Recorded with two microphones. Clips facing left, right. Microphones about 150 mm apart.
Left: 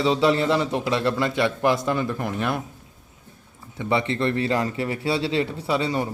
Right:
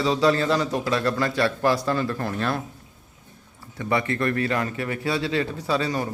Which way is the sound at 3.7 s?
20° left (ahead or behind).